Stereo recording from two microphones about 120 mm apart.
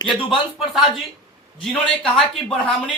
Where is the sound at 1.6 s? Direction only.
10° left (ahead or behind).